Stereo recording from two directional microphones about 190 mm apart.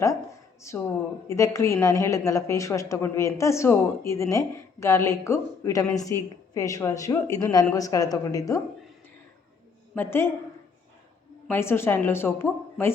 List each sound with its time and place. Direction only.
1.3 s a woman's voice: 15° left (ahead or behind)
9.9 s a woman's voice: 10° left (ahead or behind)
11.4 s a woman's voice: 10° left (ahead or behind)